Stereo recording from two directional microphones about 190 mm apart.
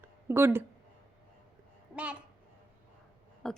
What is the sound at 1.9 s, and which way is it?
Speech, 5° right (ahead or behind).